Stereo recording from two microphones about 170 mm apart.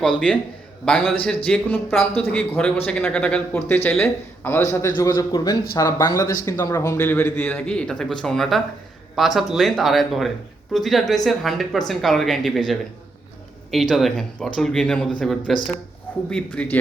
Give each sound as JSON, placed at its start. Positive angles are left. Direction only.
{"t": 0.0, "sound": "a man's voice", "side_deg": 5}